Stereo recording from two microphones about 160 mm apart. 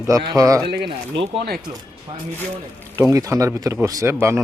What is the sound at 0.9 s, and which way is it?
Speech, 35° right (ahead or behind).